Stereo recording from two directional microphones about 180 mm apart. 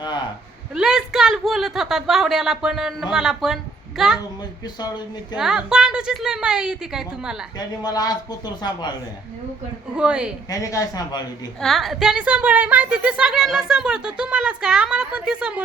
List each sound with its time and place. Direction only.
0.7 s a woman's voice: 5° right (ahead or behind)
4.6 s speech: 25° left (ahead or behind)
5.4 s a woman's voice: centre (ahead or behind)
7.8 s speech: 20° left (ahead or behind)
9.9 s a woman's voice: 5° right (ahead or behind)
10.5 s speech: 20° left (ahead or behind)
11.6 s a woman's voice: centre (ahead or behind)